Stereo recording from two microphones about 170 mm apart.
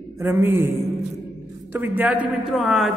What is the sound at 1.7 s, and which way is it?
A woman's voice, 10° right (ahead or behind).